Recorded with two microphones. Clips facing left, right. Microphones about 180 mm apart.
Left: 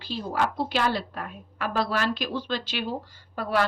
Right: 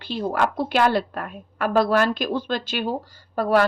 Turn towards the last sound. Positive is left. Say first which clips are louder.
# right 7 dB
turn(degrees=-45)  # may be behind; listen again after turning